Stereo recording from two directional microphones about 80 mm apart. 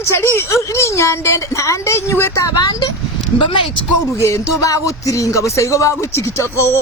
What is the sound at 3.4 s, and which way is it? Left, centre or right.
Speech, left.